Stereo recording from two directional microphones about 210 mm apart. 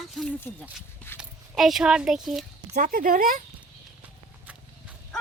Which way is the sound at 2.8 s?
40° right (ahead or behind).